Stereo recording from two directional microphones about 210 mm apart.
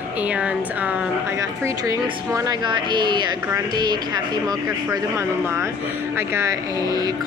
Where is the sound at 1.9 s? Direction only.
15° right (ahead or behind).